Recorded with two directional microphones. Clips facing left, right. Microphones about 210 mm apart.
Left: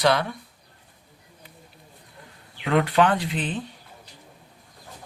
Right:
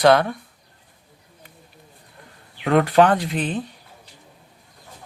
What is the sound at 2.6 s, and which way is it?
Speech, 45° right (ahead or behind).